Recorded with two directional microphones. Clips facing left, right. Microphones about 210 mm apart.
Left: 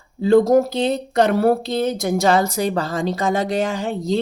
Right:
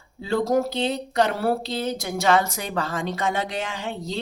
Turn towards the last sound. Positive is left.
turn(degrees=40)  # may be behind; listen again after turning